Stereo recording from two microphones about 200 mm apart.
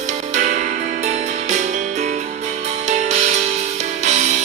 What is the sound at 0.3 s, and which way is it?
Music, 40° right (ahead or behind).